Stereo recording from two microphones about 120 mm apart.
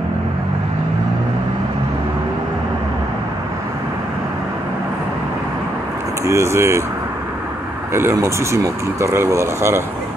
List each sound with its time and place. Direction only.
6.2 s speech: 25° right (ahead or behind)
7.9 s speech: 20° right (ahead or behind)